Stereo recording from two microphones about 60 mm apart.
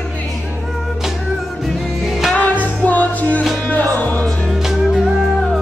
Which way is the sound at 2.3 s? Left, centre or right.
Left.